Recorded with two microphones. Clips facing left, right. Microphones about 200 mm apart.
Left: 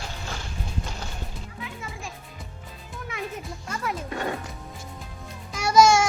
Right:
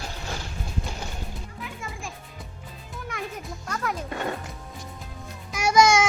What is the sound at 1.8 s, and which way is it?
Music, centre (ahead or behind).